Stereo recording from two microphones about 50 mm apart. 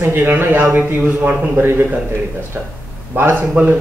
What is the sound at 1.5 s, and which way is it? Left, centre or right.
Speech, right.